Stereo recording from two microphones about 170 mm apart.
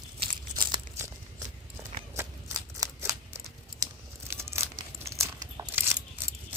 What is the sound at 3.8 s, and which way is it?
Tearing, 15° right (ahead or behind).